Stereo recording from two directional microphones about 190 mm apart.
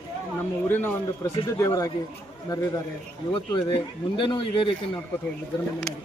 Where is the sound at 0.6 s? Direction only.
10° left (ahead or behind).